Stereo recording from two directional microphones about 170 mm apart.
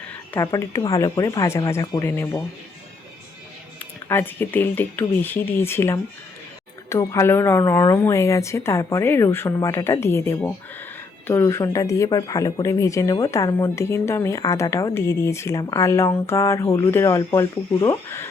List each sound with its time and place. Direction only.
0.3 s speech: 20° left (ahead or behind)
4.1 s a woman's voice: 10° left (ahead or behind)